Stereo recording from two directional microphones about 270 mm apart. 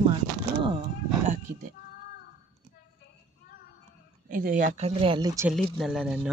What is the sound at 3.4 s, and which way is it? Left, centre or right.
Child singing, left.